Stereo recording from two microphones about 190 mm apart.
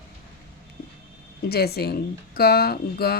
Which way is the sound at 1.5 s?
55° left (ahead or behind).